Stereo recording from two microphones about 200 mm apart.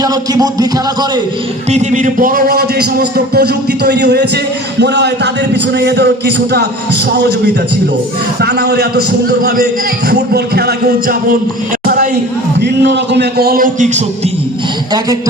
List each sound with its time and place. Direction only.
0.0 s music: 20° right (ahead or behind)
1.7 s a man's voice: 35° right (ahead or behind); by 4.3 s 55° right (ahead or behind)
4.8 s music: 55° right (ahead or behind)
8.4 s a man's voice: 55° right (ahead or behind)
12.5 s a man's voice: 60° right (ahead or behind); by 14.0 s 40° right (ahead or behind)